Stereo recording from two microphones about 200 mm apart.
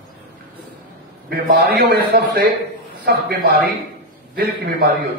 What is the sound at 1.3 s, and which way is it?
Speech, 50° right (ahead or behind).